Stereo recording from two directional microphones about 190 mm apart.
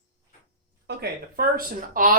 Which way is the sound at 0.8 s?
55° right (ahead or behind).